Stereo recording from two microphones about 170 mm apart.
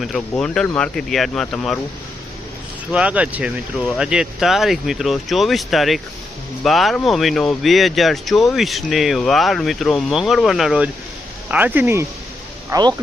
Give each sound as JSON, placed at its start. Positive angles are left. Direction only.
{"t": 0.0, "sound": "speech", "side_deg": 5}
{"t": 2.9, "sound": "speech", "side_deg": -5}
{"t": 12.7, "sound": "speech", "side_deg": -25}